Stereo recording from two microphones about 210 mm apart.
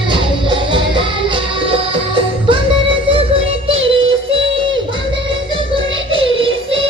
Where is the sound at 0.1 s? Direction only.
25° right (ahead or behind).